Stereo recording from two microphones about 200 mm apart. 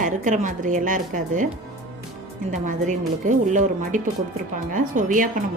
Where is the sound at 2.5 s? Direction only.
40° right (ahead or behind).